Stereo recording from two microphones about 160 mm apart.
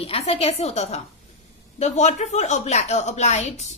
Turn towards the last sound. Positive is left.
turn(degrees=45)  # may be behind; listen again after turning